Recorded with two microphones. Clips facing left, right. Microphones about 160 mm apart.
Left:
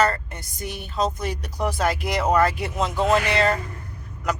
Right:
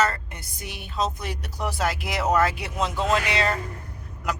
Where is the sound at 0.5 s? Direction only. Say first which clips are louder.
Left 6 dB; 45° left (ahead or behind).